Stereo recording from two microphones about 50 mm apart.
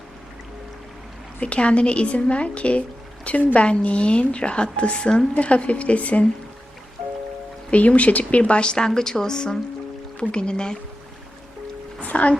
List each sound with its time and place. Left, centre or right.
1.4 s a woman's voice: left
7.7 s a woman's voice: left
11.9 s speech: left